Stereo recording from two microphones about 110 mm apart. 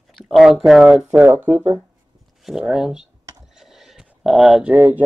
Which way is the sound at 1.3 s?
20° right (ahead or behind).